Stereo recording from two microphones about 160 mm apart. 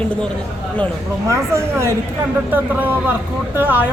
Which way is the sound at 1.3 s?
15° right (ahead or behind).